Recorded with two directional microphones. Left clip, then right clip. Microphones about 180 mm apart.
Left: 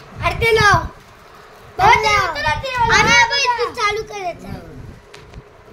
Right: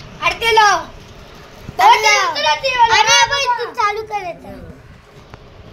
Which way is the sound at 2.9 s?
5° left (ahead or behind).